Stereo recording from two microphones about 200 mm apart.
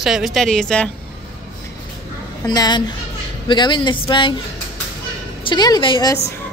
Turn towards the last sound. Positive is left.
turn(degrees=20)  # may be behind; listen again after turning